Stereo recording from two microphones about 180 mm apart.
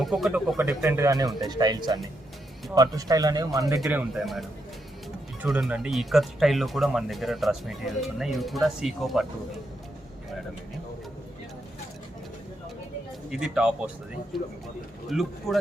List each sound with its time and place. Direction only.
0.0 s speech: centre (ahead or behind); by 3.8 s 20° right (ahead or behind)
4.1 s speech: centre (ahead or behind)
13.3 s speech: 5° right (ahead or behind)
15.1 s speech: centre (ahead or behind)